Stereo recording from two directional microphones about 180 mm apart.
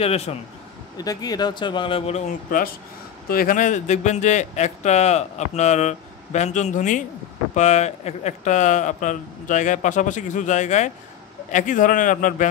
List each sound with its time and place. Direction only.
0.0 s a man's voice: 35° left (ahead or behind)
0.9 s a man's voice: 20° left (ahead or behind); by 12.4 s 45° left (ahead or behind)